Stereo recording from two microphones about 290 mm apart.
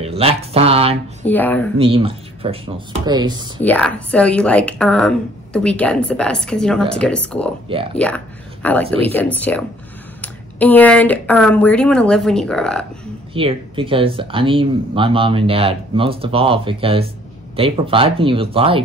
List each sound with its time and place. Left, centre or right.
0.0 s speech: centre
1.2 s a woman's voice: centre
1.8 s speech: centre
3.6 s a woman's voice: centre
7.7 s speech: centre
8.6 s a woman's voice: centre
13.3 s speech: centre